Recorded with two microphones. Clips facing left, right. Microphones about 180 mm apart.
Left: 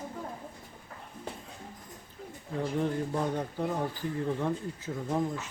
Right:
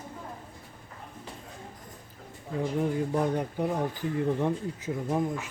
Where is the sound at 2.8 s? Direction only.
15° right (ahead or behind).